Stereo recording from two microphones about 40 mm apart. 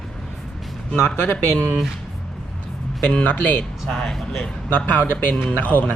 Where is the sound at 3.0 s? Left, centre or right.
Left.